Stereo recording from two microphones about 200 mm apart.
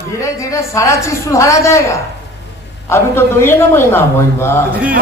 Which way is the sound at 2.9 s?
10° left (ahead or behind).